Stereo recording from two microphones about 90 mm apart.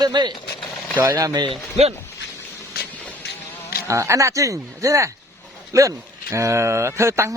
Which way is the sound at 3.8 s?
35° right (ahead or behind).